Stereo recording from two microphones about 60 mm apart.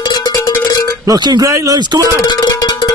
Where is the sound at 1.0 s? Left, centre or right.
Right.